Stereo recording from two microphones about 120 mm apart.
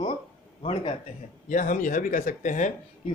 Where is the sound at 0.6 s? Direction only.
50° left (ahead or behind).